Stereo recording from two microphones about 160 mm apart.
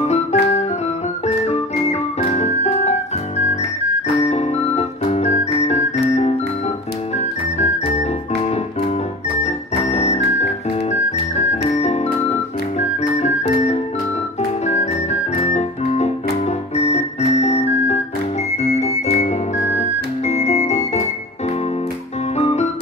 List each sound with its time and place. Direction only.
0.0 s music: 45° left (ahead or behind)
7.5 s music: 45° left (ahead or behind)
9.4 s music: 45° left (ahead or behind)
15.4 s organ: 45° left (ahead or behind)
16.7 s music: 40° left (ahead or behind)
22.4 s music: 45° left (ahead or behind)